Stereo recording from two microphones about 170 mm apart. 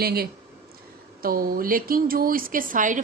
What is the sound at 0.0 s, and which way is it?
Speech, 65° right (ahead or behind).